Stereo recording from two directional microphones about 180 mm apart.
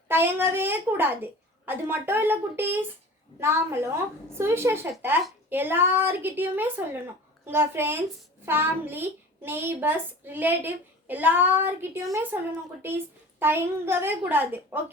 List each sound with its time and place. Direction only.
0.1 s a woman's voice: 10° right (ahead or behind)
13.4 s a woman's voice: 10° right (ahead or behind)